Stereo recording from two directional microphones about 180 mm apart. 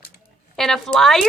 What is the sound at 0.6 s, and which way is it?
Speech, centre (ahead or behind).